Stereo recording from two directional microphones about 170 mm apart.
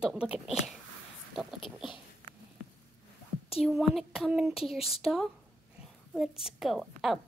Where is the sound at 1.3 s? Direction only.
Centre (ahead or behind).